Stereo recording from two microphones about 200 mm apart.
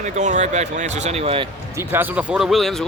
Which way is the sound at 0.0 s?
35° right (ahead or behind).